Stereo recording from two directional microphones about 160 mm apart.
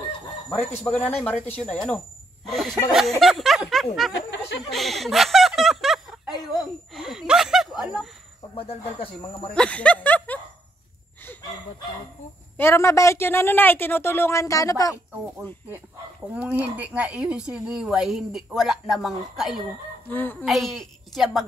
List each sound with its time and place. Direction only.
0.9 s speech: 10° left (ahead or behind)
8.5 s speech: 35° left (ahead or behind)
9.5 s speech: 5° left (ahead or behind)
12.5 s speech: 15° left (ahead or behind)
15.7 s speech: 10° right (ahead or behind)
20.1 s speech: 10° left (ahead or behind)
20.4 s speech: centre (ahead or behind)